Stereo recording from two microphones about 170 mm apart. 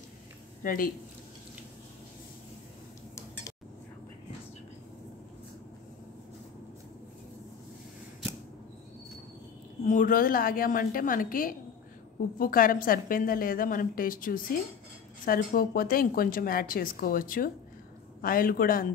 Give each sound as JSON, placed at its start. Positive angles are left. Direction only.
{"t": 0.7, "sound": "a woman's voice", "side_deg": 55}
{"t": 9.8, "sound": "a woman's voice", "side_deg": 55}